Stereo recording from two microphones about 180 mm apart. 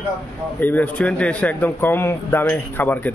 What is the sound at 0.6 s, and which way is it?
Speech, 10° left (ahead or behind).